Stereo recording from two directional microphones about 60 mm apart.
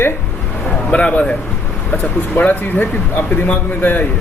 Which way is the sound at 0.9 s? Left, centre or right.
Left.